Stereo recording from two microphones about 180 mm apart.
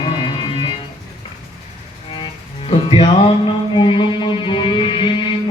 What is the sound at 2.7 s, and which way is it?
Music, 30° left (ahead or behind).